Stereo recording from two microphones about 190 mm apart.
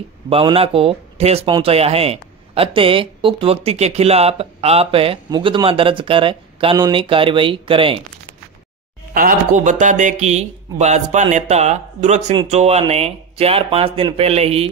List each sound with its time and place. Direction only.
0.3 s speech: 30° right (ahead or behind)
9.1 s speech: 45° right (ahead or behind)